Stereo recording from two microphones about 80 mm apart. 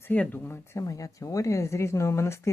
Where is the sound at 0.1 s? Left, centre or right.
Left.